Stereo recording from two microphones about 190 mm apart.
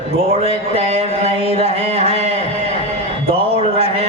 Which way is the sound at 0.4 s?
30° right (ahead or behind).